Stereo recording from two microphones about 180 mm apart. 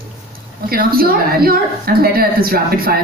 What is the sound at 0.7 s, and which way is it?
Speech, 55° right (ahead or behind).